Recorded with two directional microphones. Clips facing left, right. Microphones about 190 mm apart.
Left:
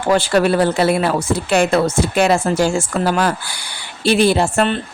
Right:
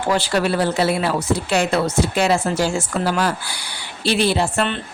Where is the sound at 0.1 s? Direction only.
50° left (ahead or behind).